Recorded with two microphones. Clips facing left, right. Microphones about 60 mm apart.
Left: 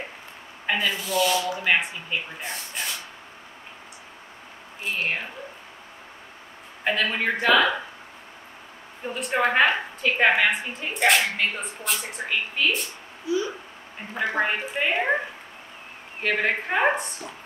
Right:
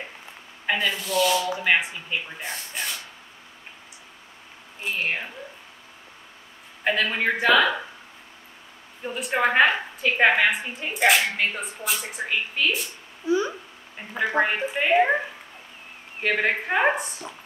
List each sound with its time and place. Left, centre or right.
0.7 s a woman's voice: centre
5.0 s speech: centre
6.8 s a woman's voice: centre
9.0 s a woman's voice: centre
13.3 s speech: right
14.4 s a woman's voice: centre